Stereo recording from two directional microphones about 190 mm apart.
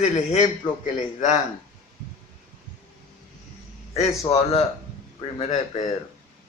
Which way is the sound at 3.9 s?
30° left (ahead or behind).